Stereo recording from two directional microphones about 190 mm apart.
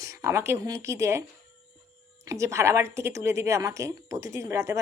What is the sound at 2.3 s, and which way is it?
A woman's voice, 15° right (ahead or behind).